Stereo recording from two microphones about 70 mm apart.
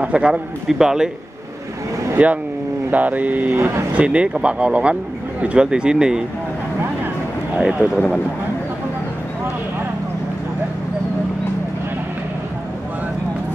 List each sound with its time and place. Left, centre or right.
0.0 s a man's voice: centre
2.2 s a man's voice: centre
7.5 s a man's voice: centre